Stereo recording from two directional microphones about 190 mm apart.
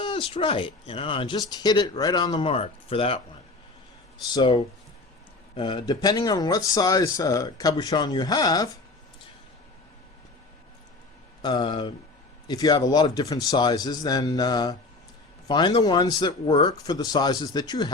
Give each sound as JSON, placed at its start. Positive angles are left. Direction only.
{"t": 0.0, "sound": "speech", "side_deg": 30}
{"t": 4.3, "sound": "speech", "side_deg": 25}
{"t": 11.4, "sound": "speech", "side_deg": 20}